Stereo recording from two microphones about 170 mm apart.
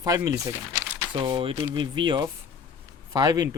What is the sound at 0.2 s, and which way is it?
Speech, 20° right (ahead or behind).